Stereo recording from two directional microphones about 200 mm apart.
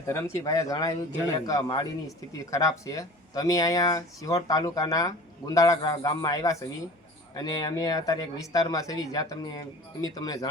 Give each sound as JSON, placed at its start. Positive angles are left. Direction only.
{"t": 0.3, "sound": "speech", "side_deg": 15}